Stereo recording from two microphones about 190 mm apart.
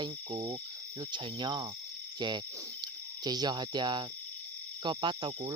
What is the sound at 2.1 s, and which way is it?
Cricket, 25° right (ahead or behind).